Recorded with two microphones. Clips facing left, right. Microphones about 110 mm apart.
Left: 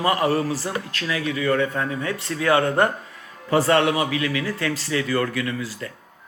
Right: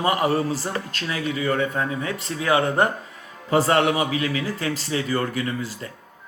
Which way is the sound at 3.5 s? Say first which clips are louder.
Even; 25° right (ahead or behind).